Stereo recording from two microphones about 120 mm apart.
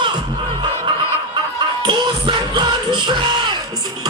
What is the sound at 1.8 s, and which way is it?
Music, 40° right (ahead or behind).